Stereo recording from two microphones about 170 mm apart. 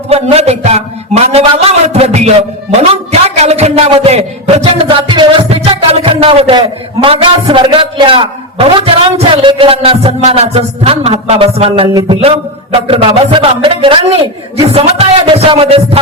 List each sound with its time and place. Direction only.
0.1 s a man's voice: 35° right (ahead or behind)